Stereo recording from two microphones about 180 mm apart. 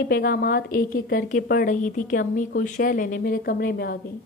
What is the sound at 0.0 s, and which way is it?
A woman's voice, 60° left (ahead or behind).